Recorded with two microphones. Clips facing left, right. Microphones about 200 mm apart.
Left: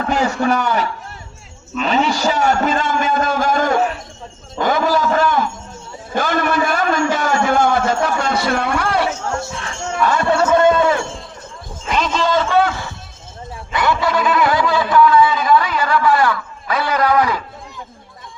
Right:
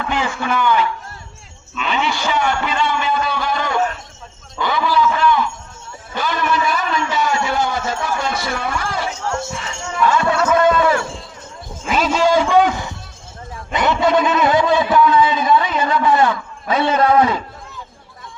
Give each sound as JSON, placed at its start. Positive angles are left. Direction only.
{"t": 0.0, "sound": "a man's voice", "side_deg": 40}
{"t": 10.1, "sound": "a sound", "side_deg": 35}
{"t": 11.9, "sound": "a man's voice", "side_deg": -5}